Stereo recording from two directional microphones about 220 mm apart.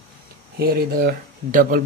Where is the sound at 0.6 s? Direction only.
45° right (ahead or behind).